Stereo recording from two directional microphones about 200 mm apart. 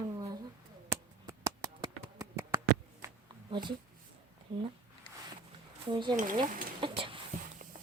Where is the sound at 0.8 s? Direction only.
15° right (ahead or behind).